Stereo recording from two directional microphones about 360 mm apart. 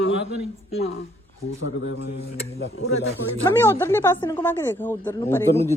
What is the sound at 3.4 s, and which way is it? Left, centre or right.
Speech, centre.